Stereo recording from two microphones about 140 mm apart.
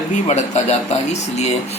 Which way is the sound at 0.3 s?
50° left (ahead or behind).